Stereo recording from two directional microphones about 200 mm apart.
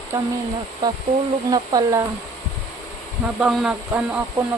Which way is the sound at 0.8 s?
20° right (ahead or behind).